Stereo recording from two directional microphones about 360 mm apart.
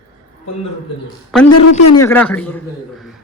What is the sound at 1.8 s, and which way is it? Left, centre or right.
Speech, left.